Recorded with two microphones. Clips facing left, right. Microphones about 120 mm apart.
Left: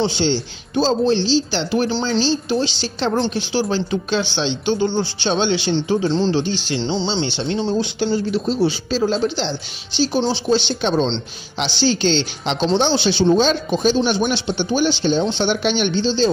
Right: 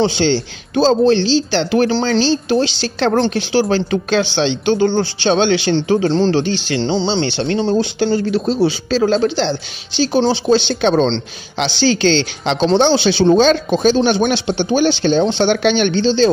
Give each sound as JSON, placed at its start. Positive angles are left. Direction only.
{"t": 0.0, "sound": "speech", "side_deg": -75}